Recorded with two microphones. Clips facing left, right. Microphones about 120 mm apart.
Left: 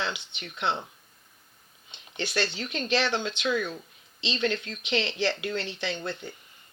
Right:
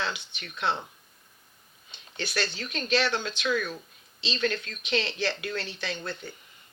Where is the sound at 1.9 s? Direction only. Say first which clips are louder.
Left 2 dB; 25° left (ahead or behind).